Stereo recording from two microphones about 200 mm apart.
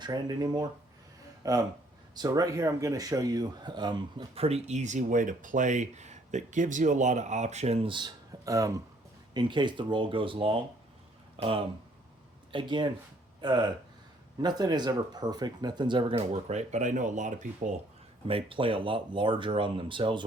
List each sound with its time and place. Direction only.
0.0 s speech: 20° right (ahead or behind); by 17.7 s 40° right (ahead or behind)
18.3 s speech: 25° right (ahead or behind)